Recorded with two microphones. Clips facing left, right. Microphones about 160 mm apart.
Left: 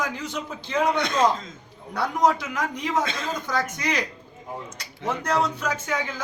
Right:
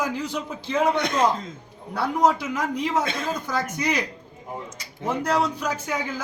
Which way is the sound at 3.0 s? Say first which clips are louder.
Right 1 dB; 55° right (ahead or behind).